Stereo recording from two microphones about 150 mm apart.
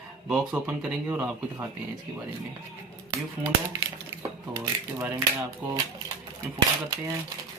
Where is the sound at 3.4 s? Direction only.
20° right (ahead or behind).